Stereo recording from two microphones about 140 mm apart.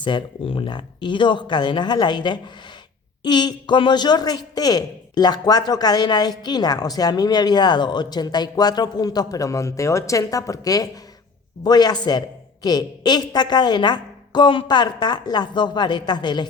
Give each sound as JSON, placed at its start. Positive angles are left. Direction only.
{"t": 0.0, "sound": "a woman's voice", "side_deg": 35}